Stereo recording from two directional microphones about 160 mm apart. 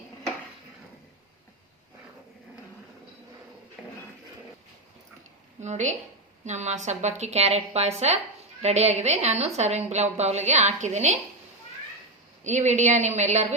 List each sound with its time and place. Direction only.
5.5 s a woman's voice: 45° right (ahead or behind)
12.4 s a woman's voice: 45° right (ahead or behind)